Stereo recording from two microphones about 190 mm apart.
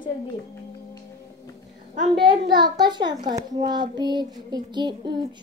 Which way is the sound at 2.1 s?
25° right (ahead or behind).